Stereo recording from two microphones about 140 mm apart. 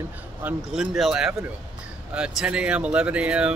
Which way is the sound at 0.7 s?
Centre (ahead or behind).